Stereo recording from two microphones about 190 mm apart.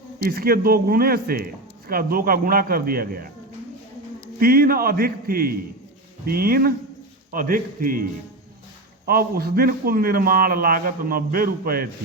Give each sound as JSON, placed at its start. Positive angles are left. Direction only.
{"t": 0.2, "sound": "a man's voice", "side_deg": -50}
{"t": 4.4, "sound": "a man's voice", "side_deg": -50}
{"t": 9.0, "sound": "a man's voice", "side_deg": -50}